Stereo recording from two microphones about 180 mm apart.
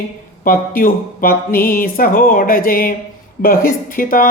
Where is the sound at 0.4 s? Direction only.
50° left (ahead or behind).